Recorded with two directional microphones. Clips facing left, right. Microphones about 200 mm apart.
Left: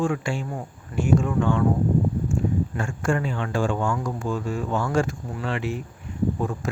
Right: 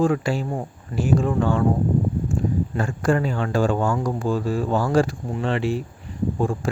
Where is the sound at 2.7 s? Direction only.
35° right (ahead or behind).